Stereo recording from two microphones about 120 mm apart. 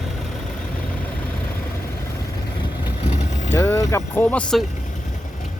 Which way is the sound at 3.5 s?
25° left (ahead or behind).